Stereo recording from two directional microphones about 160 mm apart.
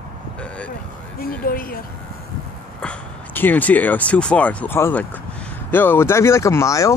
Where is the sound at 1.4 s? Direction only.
65° left (ahead or behind).